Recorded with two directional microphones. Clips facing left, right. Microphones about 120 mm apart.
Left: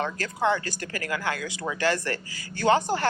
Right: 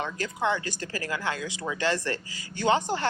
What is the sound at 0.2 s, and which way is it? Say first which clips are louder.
Speech: left 1 dB; 20° right (ahead or behind).